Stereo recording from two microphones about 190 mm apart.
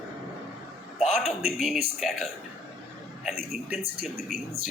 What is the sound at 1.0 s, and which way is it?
Speech, centre (ahead or behind).